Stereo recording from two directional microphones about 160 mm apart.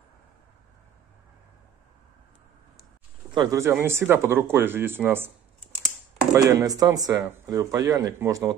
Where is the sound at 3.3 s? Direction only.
25° right (ahead or behind).